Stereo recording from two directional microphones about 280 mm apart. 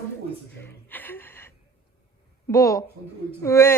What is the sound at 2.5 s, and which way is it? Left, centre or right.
Speech, centre.